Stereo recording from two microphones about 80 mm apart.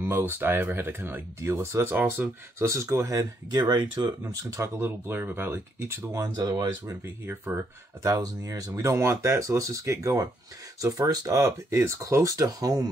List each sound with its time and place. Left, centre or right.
0.0 s speech: right
4.4 s speech: right
4.7 s speech: right
6.1 s speech: right
7.2 s speech: right
8.0 s speech: right